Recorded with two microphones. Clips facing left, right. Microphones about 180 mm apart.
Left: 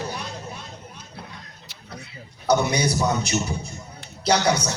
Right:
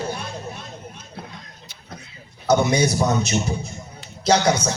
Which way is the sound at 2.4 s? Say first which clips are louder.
Right 3 dB; 25° right (ahead or behind).